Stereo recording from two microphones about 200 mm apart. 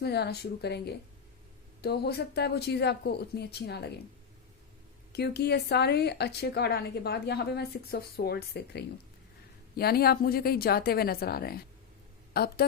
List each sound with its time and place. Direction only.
0.0 s speech: 55° left (ahead or behind)
5.1 s a woman's voice: 55° left (ahead or behind)